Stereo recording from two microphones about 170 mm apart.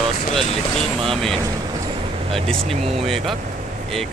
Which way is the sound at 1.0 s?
Centre (ahead or behind).